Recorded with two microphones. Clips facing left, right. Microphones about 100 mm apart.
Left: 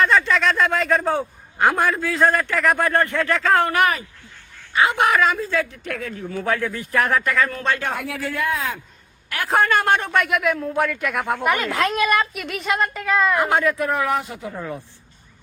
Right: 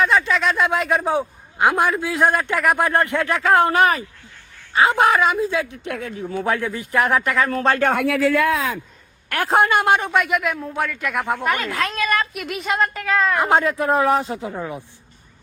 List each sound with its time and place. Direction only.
0.0 s a man's voice: 5° right (ahead or behind)
3.7 s speech: 30° right (ahead or behind)
5.3 s a man's voice: 15° right (ahead or behind)
7.5 s speech: 35° right (ahead or behind)
8.0 s speech: 90° right
9.5 s speech: 20° right (ahead or behind); by 11.4 s centre (ahead or behind)
11.4 s speech: 20° left (ahead or behind)
12.2 s speech: centre (ahead or behind)
13.4 s speech: 25° right (ahead or behind)
14.6 s a man's voice: 10° right (ahead or behind)